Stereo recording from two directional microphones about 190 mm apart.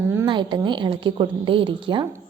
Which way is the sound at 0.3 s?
25° right (ahead or behind).